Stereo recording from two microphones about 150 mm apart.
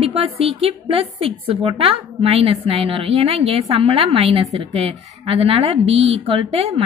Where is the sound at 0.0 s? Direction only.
40° right (ahead or behind).